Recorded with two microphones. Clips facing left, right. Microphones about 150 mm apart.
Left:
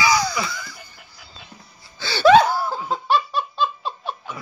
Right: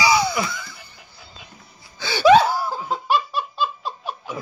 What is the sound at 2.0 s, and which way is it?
Gasp, 15° right (ahead or behind).